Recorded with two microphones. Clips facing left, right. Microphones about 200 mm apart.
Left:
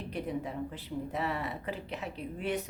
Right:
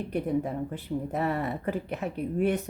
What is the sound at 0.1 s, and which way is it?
Speech, 50° right (ahead or behind).